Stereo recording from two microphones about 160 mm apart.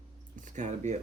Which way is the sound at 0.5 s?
45° right (ahead or behind).